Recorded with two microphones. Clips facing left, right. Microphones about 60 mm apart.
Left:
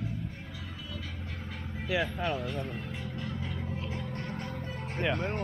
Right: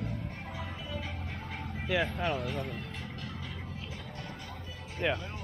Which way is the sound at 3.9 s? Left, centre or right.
Left.